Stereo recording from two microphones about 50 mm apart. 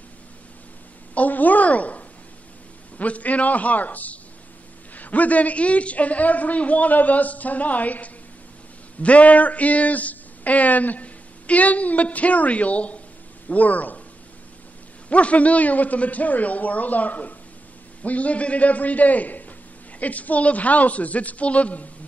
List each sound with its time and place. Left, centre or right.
1.1 s a sound: left
3.0 s a man's voice: left
15.0 s a man's voice: left